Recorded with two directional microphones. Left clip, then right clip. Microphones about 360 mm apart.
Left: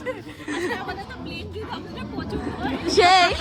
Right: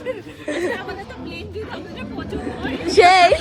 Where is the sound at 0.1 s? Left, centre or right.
Centre.